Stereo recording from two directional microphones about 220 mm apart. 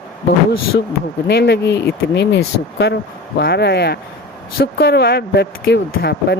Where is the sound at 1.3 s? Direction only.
50° left (ahead or behind).